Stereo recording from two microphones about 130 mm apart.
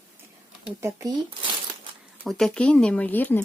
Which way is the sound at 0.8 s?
20° right (ahead or behind).